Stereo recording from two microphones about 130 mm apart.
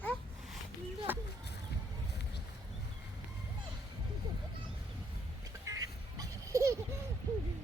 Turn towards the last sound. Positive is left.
turn(degrees=-25)  # may be behind; listen again after turning